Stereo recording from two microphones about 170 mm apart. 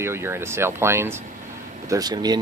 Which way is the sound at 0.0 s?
15° right (ahead or behind).